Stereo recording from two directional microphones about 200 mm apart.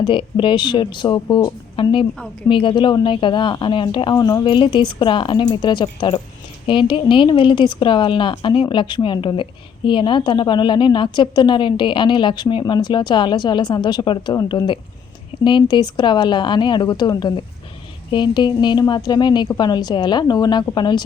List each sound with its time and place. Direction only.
0.0 s speech: 25° left (ahead or behind)